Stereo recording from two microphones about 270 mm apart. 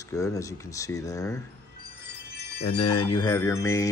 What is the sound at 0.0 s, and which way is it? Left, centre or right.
A man's voice, centre.